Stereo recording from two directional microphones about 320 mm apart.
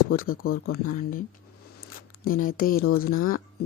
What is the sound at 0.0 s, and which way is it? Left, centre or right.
Speech, left.